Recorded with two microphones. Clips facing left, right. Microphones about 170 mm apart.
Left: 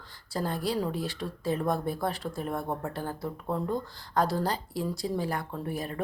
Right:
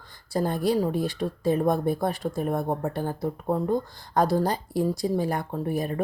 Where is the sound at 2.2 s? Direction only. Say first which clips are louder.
Right 6 dB; 40° right (ahead or behind).